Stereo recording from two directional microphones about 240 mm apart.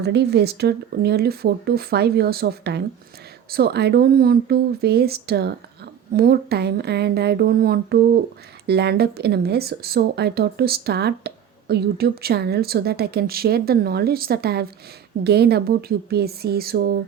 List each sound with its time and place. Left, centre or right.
0.0 s speech: right